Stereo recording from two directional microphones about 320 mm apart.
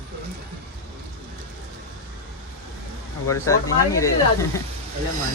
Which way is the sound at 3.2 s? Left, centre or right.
Centre.